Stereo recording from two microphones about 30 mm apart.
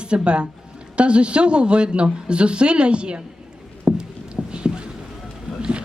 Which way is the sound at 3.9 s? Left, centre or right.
Right.